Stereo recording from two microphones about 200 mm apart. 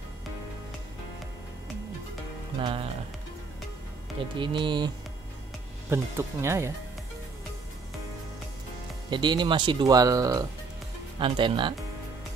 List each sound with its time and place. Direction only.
2.6 s speech: 25° right (ahead or behind)
4.4 s speech: 25° right (ahead or behind)
9.1 s speech: 20° right (ahead or behind)